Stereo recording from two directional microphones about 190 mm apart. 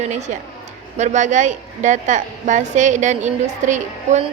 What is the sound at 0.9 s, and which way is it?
A woman's voice, 40° right (ahead or behind).